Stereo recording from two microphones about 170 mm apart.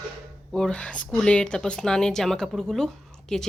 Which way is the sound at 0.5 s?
5° left (ahead or behind).